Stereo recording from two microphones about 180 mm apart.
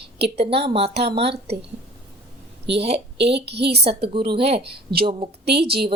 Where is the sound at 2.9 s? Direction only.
70° right (ahead or behind).